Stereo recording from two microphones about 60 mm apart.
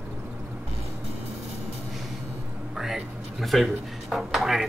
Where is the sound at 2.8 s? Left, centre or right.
Centre.